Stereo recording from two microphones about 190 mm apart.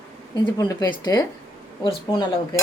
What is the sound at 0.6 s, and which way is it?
Speech, 15° left (ahead or behind).